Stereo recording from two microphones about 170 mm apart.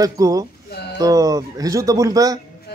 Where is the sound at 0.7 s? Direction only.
75° left (ahead or behind).